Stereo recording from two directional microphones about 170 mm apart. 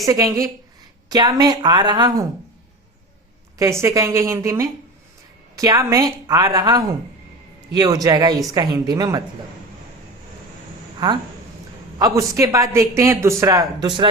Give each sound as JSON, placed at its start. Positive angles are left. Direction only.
{"t": 0.0, "sound": "a man's voice", "side_deg": -20}
{"t": 3.6, "sound": "a woman's voice", "side_deg": -15}
{"t": 11.9, "sound": "a man's voice", "side_deg": -20}